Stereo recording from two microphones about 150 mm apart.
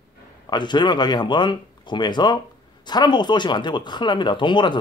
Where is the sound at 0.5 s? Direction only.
30° left (ahead or behind).